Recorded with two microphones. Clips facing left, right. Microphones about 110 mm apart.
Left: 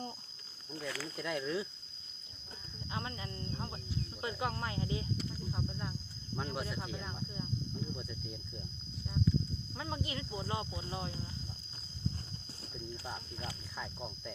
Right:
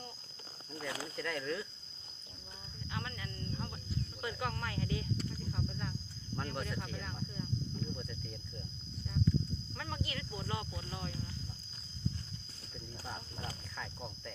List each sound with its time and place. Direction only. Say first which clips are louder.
0.9 s speech: even; 25° right (ahead or behind)
1.1 s speech: left 3 dB; 15° left (ahead or behind)
2.9 s speech: left 2 dB; 25° left (ahead or behind)
6.3 s speech: left 1 dB; 10° left (ahead or behind)
9.7 s speech: left 3 dB; 20° left (ahead or behind)